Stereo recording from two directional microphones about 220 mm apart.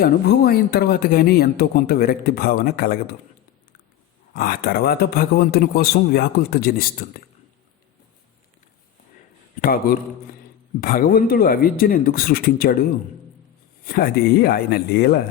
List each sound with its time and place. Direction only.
0.0 s speech: 45° left (ahead or behind)
4.4 s speech: 40° left (ahead or behind)
9.6 s speech: 40° left (ahead or behind)